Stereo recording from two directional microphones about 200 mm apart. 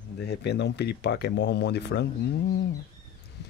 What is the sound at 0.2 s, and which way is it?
Speech, 55° left (ahead or behind).